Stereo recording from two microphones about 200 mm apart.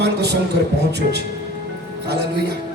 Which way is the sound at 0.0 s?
55° right (ahead or behind).